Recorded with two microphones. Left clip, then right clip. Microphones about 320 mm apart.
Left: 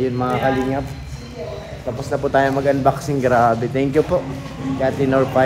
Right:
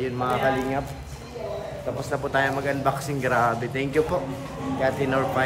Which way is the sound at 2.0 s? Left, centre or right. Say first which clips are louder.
Left 7 dB; centre.